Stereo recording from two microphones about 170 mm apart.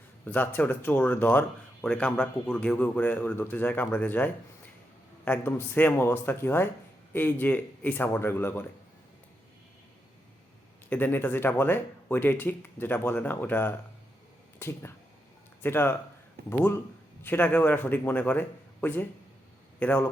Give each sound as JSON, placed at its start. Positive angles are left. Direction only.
{"t": 0.3, "sound": "speech", "side_deg": 10}
{"t": 10.8, "sound": "speech", "side_deg": 10}
{"t": 17.2, "sound": "speech", "side_deg": 10}